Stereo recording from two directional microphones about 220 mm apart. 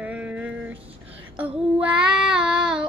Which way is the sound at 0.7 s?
25° right (ahead or behind).